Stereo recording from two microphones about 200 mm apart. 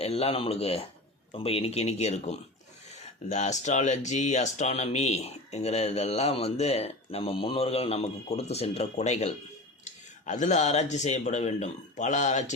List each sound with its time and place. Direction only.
0.0 s speech: 30° left (ahead or behind)